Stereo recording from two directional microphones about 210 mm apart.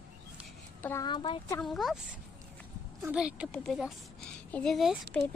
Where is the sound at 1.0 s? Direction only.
20° left (ahead or behind).